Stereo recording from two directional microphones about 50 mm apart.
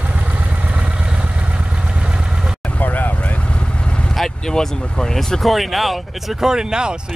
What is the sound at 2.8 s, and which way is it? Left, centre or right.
Vehicle, left.